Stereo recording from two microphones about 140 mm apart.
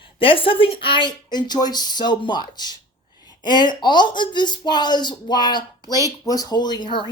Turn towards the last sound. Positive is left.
turn(degrees=35)  # may be behind; listen again after turning